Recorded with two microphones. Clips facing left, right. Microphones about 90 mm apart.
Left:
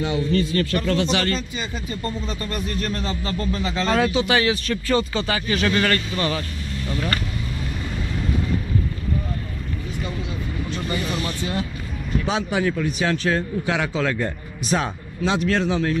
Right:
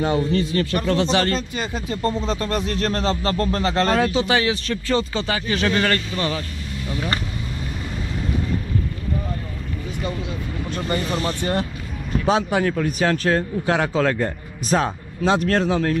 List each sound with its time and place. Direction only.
0.0 s speech: 45° right (ahead or behind)
0.3 s speech: 20° right (ahead or behind)
1.0 s speech: 35° right (ahead or behind)
1.5 s speech: 60° right (ahead or behind)
3.9 s speech: 35° right (ahead or behind)
4.4 s speech: 25° right (ahead or behind)
6.1 s speech: 5° right (ahead or behind)
10.7 s speech: 40° right (ahead or behind)
12.3 s speech: 45° right (ahead or behind)